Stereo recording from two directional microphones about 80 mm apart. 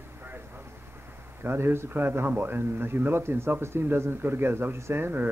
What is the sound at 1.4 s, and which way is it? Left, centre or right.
Speech, right.